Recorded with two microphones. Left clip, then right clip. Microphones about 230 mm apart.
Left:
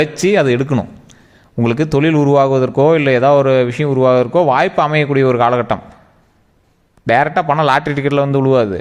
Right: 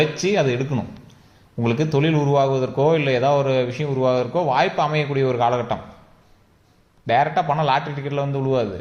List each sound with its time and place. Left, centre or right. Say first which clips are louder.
0.0 s a man's voice: left 6 dB; left
7.1 s a man's voice: left 6 dB; left